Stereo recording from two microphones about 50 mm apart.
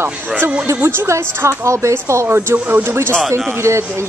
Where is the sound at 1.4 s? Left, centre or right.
Right.